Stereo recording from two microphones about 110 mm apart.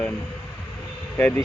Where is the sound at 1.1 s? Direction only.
15° left (ahead or behind).